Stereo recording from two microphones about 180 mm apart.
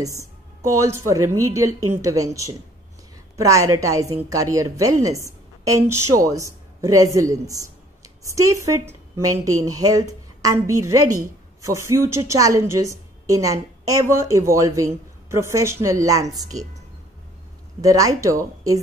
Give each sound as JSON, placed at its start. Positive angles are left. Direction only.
{"t": 0.6, "sound": "a woman's voice", "side_deg": -15}
{"t": 17.8, "sound": "a woman's voice", "side_deg": -20}